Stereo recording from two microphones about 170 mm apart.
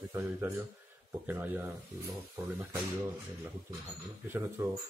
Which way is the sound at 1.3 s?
10° right (ahead or behind).